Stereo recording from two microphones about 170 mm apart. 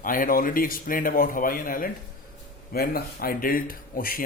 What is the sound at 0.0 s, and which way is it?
Speech, 55° left (ahead or behind).